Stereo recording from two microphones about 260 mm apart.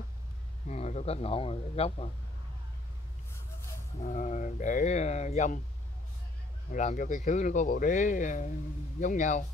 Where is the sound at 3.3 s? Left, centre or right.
Centre.